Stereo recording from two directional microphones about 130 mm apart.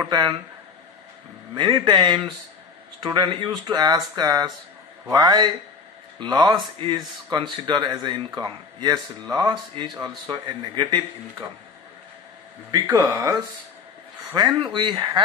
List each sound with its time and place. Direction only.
0.0 s speech: 35° right (ahead or behind)
1.5 s speech: 35° right (ahead or behind)
12.7 s speech: 30° right (ahead or behind)